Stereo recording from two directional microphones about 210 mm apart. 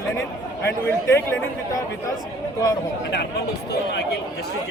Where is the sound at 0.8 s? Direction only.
10° left (ahead or behind).